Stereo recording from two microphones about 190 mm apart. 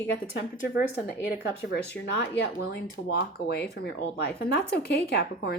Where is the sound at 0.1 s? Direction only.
55° left (ahead or behind).